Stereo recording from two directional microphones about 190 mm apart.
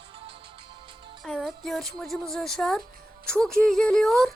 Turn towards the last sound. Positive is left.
turn(degrees=5)  # may be behind; listen again after turning